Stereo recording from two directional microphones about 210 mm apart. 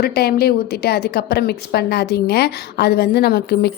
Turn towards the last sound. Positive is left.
turn(degrees=50)  # may be behind; listen again after turning